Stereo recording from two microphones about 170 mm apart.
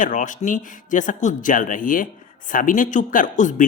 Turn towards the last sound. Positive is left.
turn(degrees=50)  # may be behind; listen again after turning